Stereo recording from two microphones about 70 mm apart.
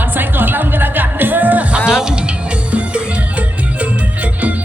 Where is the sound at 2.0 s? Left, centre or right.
Centre.